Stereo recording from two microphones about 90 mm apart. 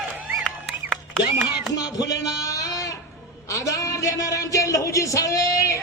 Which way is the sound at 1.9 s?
45° left (ahead or behind).